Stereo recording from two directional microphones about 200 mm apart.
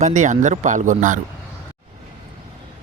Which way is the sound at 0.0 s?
40° right (ahead or behind).